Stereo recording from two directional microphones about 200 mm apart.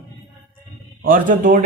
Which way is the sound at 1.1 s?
40° right (ahead or behind).